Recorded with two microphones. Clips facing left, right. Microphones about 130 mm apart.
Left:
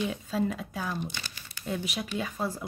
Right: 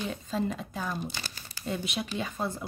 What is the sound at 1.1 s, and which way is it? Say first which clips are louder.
Crumpling: right 1 dB; 35° right (ahead or behind).